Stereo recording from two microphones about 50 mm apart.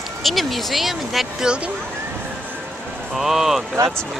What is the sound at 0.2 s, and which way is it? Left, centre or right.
Speech, centre.